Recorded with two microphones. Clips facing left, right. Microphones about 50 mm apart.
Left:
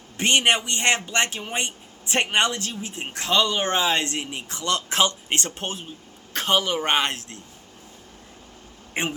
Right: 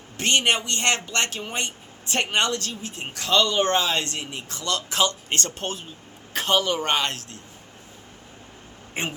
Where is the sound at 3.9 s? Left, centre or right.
Left.